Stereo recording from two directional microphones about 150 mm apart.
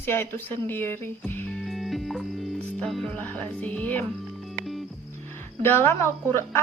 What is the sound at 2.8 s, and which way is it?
A woman's voice, 5° left (ahead or behind).